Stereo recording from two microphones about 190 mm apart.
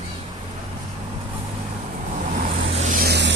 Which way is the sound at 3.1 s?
65° right (ahead or behind).